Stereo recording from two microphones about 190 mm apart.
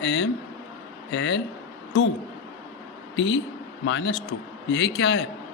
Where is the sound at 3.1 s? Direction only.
75° left (ahead or behind).